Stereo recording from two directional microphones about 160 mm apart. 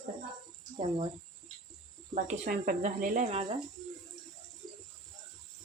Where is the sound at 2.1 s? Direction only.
55° right (ahead or behind); by 3.6 s 40° right (ahead or behind).